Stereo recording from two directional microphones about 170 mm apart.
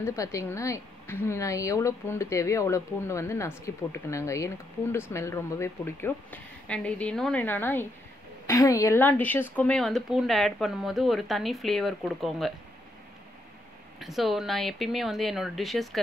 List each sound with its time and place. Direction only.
0.0 s a woman's voice: 20° left (ahead or behind); by 12.5 s centre (ahead or behind)
13.9 s speech: centre (ahead or behind)